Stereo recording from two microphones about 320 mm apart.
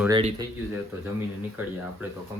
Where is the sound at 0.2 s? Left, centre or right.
Centre.